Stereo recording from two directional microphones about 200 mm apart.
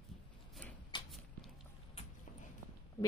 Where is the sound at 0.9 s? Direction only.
25° left (ahead or behind).